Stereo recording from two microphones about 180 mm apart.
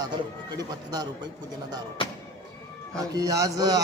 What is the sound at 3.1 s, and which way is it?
Speech, 20° right (ahead or behind).